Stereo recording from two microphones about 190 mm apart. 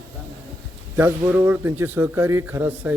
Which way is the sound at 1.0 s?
10° right (ahead or behind).